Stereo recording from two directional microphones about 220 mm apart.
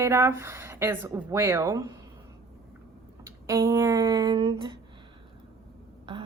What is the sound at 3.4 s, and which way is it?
Speech, 15° right (ahead or behind).